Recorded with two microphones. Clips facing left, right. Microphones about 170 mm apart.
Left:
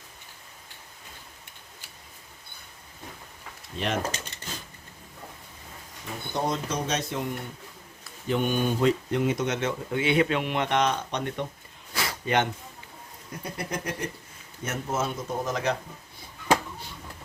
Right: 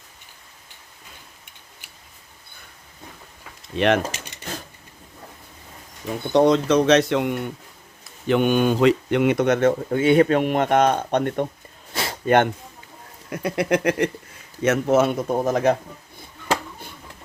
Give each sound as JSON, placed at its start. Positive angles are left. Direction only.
{"t": 3.8, "sound": "speech", "side_deg": -70}
{"t": 6.3, "sound": "speech", "side_deg": -80}
{"t": 13.3, "sound": "speech", "side_deg": -80}